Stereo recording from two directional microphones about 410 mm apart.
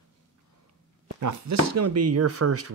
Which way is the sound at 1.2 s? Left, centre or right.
Right.